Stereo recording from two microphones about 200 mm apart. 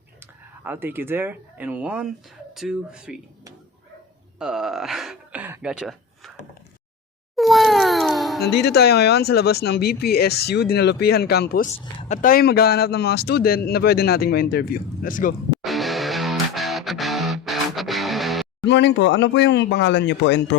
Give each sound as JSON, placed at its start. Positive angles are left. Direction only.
{"t": 0.2, "sound": "speech", "side_deg": -10}
{"t": 4.4, "sound": "gasp", "side_deg": -5}
{"t": 7.3, "sound": "a sound", "side_deg": 0}
{"t": 8.4, "sound": "speech", "side_deg": 55}
{"t": 11.9, "sound": "speech", "side_deg": 35}
{"t": 15.6, "sound": "music", "side_deg": 0}
{"t": 18.6, "sound": "speech", "side_deg": 60}